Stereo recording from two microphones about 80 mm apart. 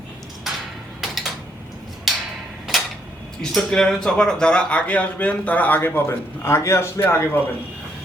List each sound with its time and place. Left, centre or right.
0.5 s a sound: centre
3.5 s a man's voice: centre; by 7.0 s left
7.0 s a man's voice: left